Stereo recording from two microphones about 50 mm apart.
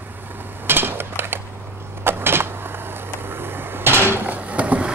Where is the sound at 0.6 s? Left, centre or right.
Right.